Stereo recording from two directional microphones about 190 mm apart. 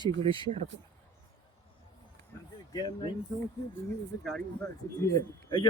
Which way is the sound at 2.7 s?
20° left (ahead or behind).